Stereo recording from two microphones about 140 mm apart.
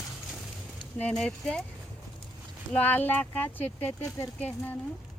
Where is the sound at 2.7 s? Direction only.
15° left (ahead or behind).